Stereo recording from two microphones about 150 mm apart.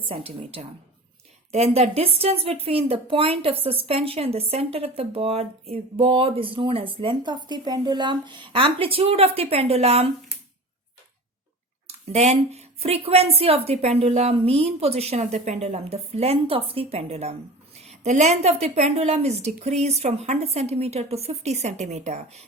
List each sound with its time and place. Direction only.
0.1 s speech: 40° right (ahead or behind)
11.9 s a woman's voice: 45° right (ahead or behind)